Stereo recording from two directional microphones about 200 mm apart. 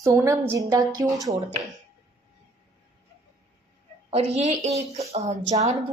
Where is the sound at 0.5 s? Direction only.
15° right (ahead or behind).